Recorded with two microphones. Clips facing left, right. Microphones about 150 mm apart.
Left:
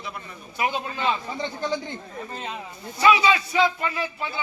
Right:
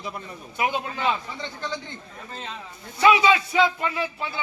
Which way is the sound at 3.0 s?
20° right (ahead or behind).